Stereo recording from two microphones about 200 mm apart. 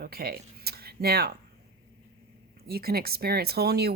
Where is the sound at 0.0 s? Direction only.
50° right (ahead or behind).